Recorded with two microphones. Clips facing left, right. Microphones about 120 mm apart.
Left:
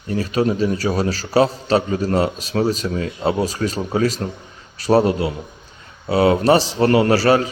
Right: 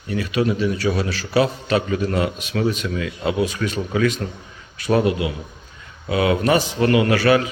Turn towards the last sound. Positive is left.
turn(degrees=35)  # may be behind; listen again after turning